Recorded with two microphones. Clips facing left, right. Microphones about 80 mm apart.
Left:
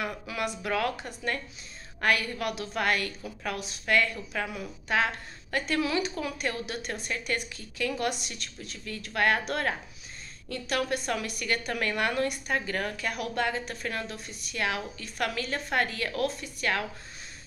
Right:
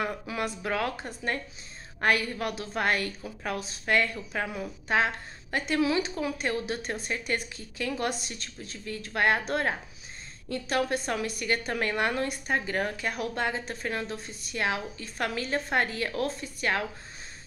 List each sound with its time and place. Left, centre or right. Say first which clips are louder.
0.0 s a woman's voice: right 1 dB; right